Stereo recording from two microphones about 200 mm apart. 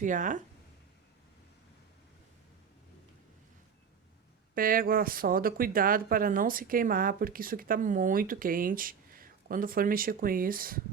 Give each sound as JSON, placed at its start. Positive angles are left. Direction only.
{"t": 0.0, "sound": "speech", "side_deg": -40}
{"t": 4.5, "sound": "speech", "side_deg": -45}